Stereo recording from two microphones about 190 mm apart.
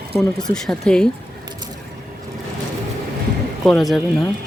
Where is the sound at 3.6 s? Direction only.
Centre (ahead or behind).